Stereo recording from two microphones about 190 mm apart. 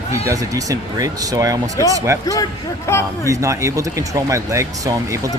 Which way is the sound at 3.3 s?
15° right (ahead or behind).